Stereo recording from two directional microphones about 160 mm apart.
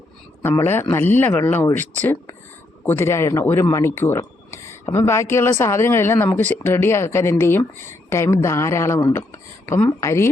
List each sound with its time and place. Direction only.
0.4 s speech: 15° left (ahead or behind)